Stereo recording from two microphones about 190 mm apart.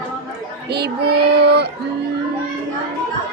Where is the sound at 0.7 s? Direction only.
60° right (ahead or behind).